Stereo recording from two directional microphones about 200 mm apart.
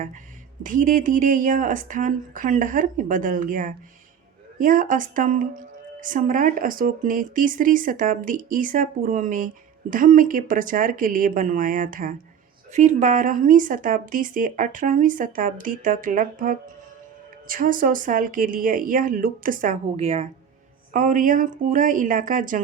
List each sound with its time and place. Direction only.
0.6 s speech: 40° right (ahead or behind)